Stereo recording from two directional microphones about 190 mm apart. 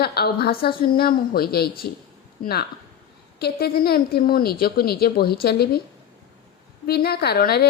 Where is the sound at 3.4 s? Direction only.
55° left (ahead or behind).